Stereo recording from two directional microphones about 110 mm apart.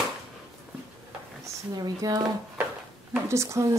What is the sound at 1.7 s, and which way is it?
Speech, 35° right (ahead or behind).